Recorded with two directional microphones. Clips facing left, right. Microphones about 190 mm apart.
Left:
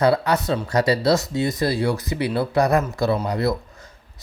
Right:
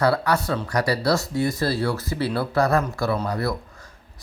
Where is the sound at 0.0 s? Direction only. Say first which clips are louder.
Left 2 dB; 20° left (ahead or behind).